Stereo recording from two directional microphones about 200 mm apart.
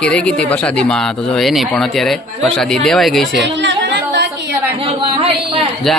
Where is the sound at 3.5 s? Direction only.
60° right (ahead or behind).